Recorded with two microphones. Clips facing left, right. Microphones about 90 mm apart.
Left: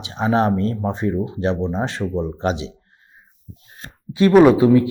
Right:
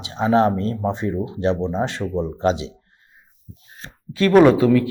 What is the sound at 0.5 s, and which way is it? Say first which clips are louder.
Speech: left 2 dB; 30° right (ahead or behind).